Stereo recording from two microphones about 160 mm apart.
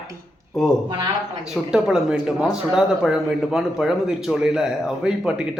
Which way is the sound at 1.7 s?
5° right (ahead or behind).